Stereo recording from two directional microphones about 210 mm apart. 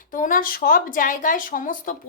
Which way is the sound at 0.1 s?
40° left (ahead or behind).